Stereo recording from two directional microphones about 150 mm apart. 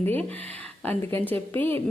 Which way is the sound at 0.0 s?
15° left (ahead or behind).